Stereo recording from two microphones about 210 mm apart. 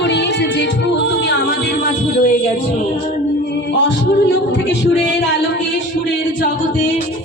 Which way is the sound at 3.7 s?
60° left (ahead or behind).